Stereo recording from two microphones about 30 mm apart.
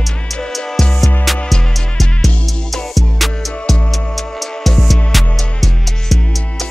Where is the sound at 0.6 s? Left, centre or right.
Centre.